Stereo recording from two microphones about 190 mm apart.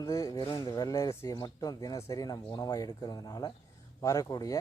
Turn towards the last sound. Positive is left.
turn(degrees=20)  # may be behind; listen again after turning